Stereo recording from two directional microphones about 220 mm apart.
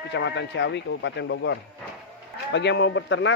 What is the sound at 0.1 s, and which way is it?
Speech, 55° left (ahead or behind).